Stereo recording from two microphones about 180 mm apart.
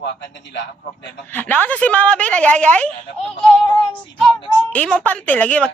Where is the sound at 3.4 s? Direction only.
25° left (ahead or behind).